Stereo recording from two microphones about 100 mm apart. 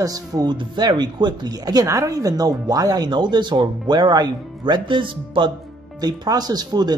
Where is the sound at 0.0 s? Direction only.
40° right (ahead or behind); by 5.5 s 55° right (ahead or behind).